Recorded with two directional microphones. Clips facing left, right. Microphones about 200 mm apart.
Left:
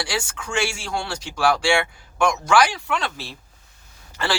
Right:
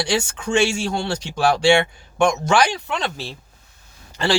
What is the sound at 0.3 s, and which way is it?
Speech, 20° right (ahead or behind).